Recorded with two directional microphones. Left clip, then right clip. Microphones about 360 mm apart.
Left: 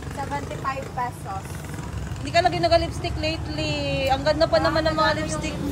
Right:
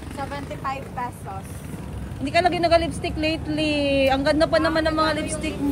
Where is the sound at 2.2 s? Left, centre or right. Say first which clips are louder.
Right 1 dB; centre.